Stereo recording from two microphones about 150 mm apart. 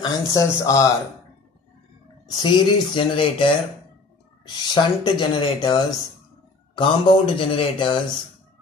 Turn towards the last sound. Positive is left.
turn(degrees=35)  # may be behind; listen again after turning